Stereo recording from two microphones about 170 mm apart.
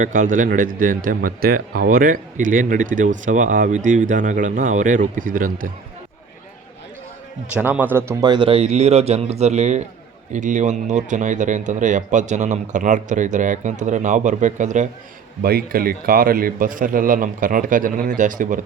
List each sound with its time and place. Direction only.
0.0 s speech: 50° right (ahead or behind)
7.5 s a man's voice: 10° right (ahead or behind); by 14.8 s 45° right (ahead or behind)
15.4 s a man's voice: 60° right (ahead or behind)